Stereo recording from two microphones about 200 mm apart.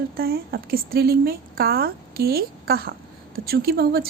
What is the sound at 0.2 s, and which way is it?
Speech, 50° right (ahead or behind).